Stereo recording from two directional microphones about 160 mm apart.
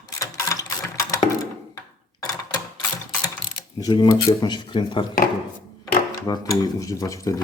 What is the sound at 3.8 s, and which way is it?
Speech, 25° left (ahead or behind).